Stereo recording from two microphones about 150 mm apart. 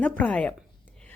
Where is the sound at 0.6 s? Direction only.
5° left (ahead or behind).